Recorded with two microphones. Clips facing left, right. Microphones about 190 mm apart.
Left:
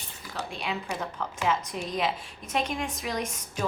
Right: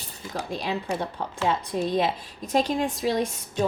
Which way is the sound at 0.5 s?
35° right (ahead or behind).